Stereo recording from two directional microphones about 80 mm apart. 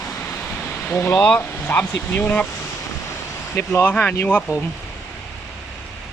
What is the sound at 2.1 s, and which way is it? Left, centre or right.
Speech, centre.